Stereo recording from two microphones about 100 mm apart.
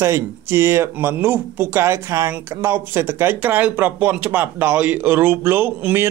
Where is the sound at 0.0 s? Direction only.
25° right (ahead or behind).